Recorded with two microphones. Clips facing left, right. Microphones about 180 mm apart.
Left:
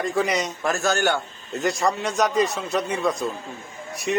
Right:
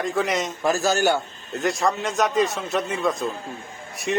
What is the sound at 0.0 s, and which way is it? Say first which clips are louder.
A man's voice: even; centre (ahead or behind).